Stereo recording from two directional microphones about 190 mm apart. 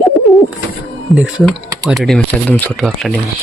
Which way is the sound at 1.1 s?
Centre (ahead or behind).